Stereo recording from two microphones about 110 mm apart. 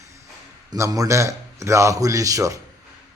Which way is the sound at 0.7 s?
35° right (ahead or behind).